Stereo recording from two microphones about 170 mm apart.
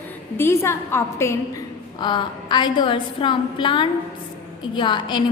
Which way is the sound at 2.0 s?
25° left (ahead or behind).